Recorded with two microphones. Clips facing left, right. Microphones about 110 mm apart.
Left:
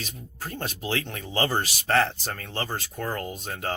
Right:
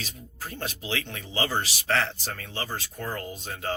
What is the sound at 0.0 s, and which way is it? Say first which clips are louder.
Speech: left 2 dB; 45° left (ahead or behind).